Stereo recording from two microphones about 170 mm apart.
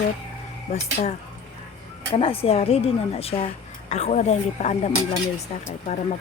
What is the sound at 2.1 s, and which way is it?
Speech, 35° left (ahead or behind).